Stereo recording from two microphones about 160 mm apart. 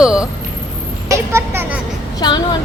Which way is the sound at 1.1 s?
15° right (ahead or behind).